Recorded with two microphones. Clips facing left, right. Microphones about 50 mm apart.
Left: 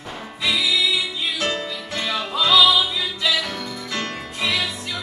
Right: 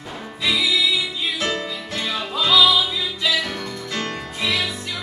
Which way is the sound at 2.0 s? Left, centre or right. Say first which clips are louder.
Left 1 dB; centre.